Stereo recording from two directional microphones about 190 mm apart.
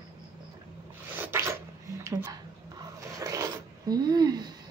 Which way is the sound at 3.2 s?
15° right (ahead or behind).